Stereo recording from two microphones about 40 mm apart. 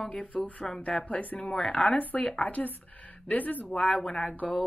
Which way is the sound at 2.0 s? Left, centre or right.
Left.